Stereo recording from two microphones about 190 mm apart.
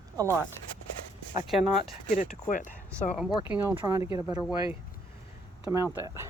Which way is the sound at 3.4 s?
15° right (ahead or behind).